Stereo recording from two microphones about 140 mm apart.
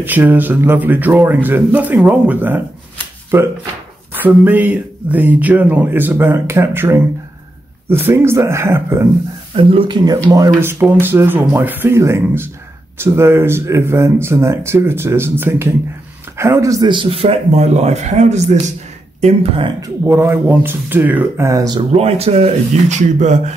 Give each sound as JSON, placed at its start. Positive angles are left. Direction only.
{"t": 0.0, "sound": "speech", "side_deg": -15}
{"t": 9.6, "sound": "speech", "side_deg": -40}
{"t": 19.2, "sound": "speech", "side_deg": -40}
{"t": 19.8, "sound": "speech", "side_deg": -20}
{"t": 21.5, "sound": "speech", "side_deg": -25}
{"t": 21.9, "sound": "speech", "side_deg": -45}